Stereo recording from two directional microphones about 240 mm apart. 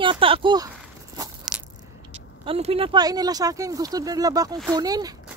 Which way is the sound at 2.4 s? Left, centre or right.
Right.